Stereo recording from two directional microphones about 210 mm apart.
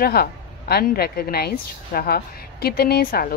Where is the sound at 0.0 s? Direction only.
45° left (ahead or behind).